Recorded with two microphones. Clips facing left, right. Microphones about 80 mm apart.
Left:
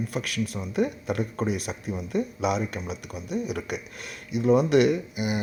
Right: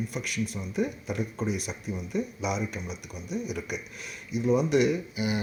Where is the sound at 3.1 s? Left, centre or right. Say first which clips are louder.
Left 3 dB; centre.